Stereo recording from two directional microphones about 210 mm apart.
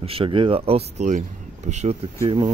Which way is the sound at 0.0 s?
25° right (ahead or behind).